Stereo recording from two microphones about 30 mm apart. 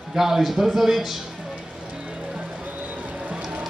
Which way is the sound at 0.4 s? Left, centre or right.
Centre.